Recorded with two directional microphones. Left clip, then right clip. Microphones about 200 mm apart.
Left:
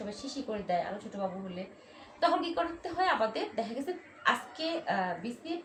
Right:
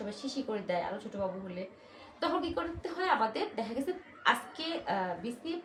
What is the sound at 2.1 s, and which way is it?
A woman's voice, 20° right (ahead or behind).